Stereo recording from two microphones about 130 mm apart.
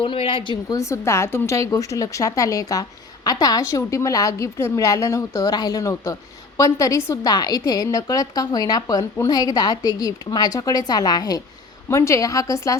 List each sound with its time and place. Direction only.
0.0 s speech: 40° left (ahead or behind)
0.8 s a woman's voice: 20° left (ahead or behind)